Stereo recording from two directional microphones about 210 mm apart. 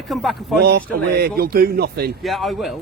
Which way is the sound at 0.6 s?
50° right (ahead or behind).